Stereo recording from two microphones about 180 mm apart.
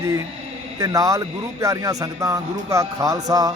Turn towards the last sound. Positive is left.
turn(degrees=-20)  # may be behind; listen again after turning